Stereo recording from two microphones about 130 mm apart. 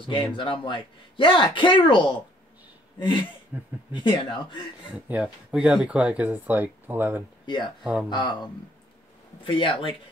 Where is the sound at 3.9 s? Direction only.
35° left (ahead or behind).